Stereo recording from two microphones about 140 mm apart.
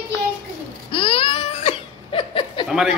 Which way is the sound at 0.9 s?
40° left (ahead or behind).